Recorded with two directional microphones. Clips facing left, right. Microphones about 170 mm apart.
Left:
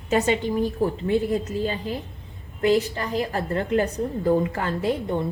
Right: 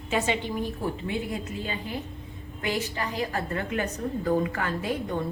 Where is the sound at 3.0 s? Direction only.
35° left (ahead or behind).